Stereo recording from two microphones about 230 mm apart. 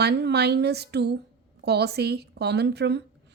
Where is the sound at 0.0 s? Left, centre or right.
Right.